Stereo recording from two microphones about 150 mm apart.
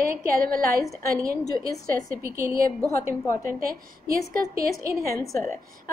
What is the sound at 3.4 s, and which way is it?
A woman's voice, 75° right (ahead or behind).